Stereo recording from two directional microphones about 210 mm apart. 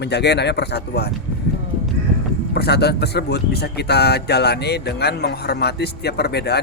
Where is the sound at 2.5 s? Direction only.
50° left (ahead or behind).